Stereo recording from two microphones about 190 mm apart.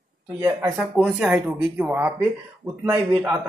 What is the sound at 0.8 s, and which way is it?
Speech, centre (ahead or behind).